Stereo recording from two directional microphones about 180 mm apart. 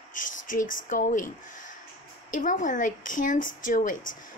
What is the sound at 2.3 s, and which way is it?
Speech, 45° left (ahead or behind).